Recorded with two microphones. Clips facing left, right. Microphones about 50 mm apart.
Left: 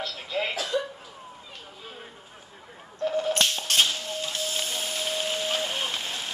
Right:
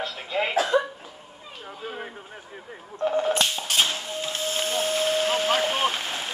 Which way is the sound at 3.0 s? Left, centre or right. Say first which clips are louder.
Right 3 dB; right.